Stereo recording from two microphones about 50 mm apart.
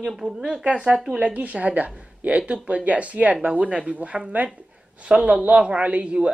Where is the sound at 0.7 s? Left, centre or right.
Right.